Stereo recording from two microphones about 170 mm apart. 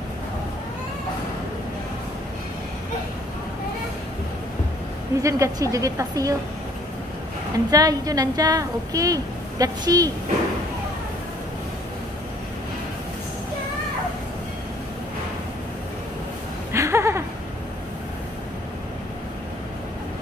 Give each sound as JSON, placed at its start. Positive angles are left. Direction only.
{"t": 5.2, "sound": "a woman's voice", "side_deg": -20}
{"t": 7.5, "sound": "a woman's voice", "side_deg": -20}
{"t": 16.7, "sound": "a sound", "side_deg": -15}